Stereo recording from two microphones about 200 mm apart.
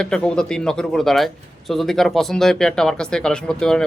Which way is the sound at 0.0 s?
5° left (ahead or behind).